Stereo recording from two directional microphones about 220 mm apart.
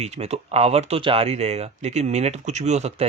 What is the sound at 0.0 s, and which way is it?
Speech, 30° right (ahead or behind).